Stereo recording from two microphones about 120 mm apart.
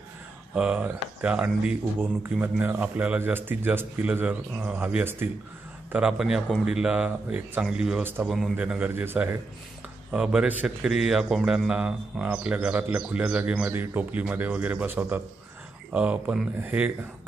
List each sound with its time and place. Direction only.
0.6 s a man's voice: 10° right (ahead or behind)
8.5 s speech: 10° right (ahead or behind)
10.1 s speech: 10° right (ahead or behind)